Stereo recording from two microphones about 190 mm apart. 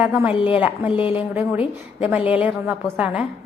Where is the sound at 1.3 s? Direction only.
10° right (ahead or behind).